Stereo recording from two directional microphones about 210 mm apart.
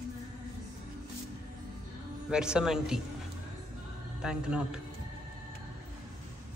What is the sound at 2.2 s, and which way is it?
Speech, 5° right (ahead or behind).